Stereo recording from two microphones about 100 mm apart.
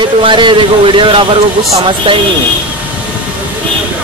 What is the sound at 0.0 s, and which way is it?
Speech, 55° right (ahead or behind).